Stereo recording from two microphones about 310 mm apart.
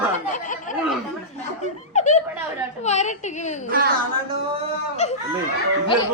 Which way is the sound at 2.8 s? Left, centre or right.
Left.